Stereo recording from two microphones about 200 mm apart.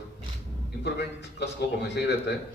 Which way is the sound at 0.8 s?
60° left (ahead or behind).